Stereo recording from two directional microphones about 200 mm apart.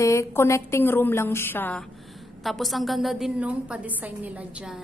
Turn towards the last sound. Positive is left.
turn(degrees=-10)  # may be behind; listen again after turning